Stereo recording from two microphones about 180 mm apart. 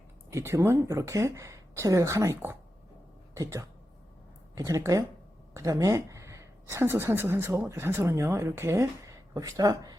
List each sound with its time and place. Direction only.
0.3 s speech: 15° right (ahead or behind)